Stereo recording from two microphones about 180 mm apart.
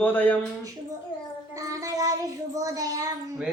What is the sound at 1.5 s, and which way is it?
Child singing, 20° right (ahead or behind).